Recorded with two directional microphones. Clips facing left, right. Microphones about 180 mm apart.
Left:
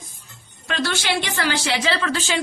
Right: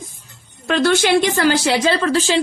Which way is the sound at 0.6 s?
50° right (ahead or behind).